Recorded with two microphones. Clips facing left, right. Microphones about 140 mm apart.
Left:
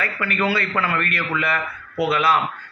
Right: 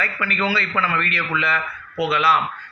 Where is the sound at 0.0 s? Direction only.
50° left (ahead or behind).